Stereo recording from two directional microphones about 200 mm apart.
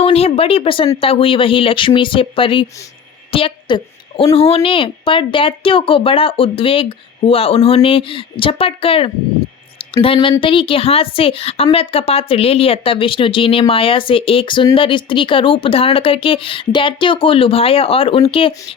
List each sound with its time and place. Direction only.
0.0 s a woman's voice: 30° left (ahead or behind)